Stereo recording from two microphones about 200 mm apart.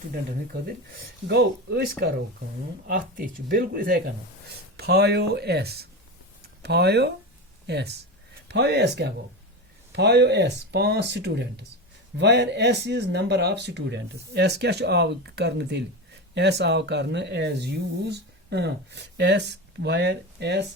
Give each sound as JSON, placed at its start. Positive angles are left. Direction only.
{"t": 1.3, "sound": "speech", "side_deg": -55}